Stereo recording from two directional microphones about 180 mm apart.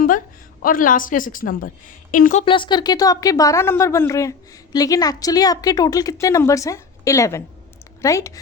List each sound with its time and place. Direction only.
0.6 s a woman's voice: 50° left (ahead or behind)
2.4 s a woman's voice: 30° left (ahead or behind)